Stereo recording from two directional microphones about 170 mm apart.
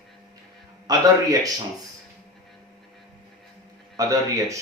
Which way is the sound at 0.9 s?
20° right (ahead or behind).